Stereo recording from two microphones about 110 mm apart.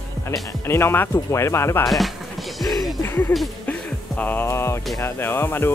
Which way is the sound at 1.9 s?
Centre (ahead or behind).